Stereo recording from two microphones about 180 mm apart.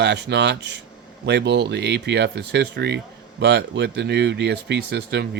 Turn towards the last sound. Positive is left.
turn(degrees=-70)  # may be behind; listen again after turning